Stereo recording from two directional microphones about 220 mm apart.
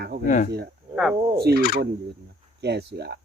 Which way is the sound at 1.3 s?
45° right (ahead or behind).